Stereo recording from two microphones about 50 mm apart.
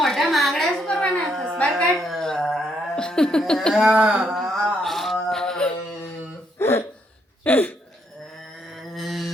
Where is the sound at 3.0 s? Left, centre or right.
Centre.